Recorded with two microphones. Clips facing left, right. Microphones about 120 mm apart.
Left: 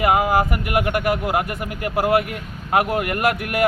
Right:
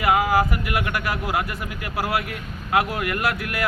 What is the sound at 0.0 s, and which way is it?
A man's voice, 50° left (ahead or behind).